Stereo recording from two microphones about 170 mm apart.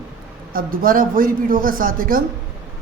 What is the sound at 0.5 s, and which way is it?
A man's voice, 55° right (ahead or behind).